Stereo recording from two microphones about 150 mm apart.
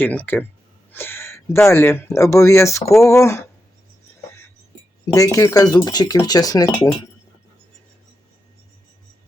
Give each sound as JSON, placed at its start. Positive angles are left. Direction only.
{"t": 0.0, "sound": "speech", "side_deg": 10}
{"t": 5.1, "sound": "speech", "side_deg": 20}